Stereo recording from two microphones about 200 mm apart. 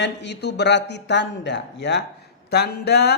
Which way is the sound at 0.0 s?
60° left (ahead or behind).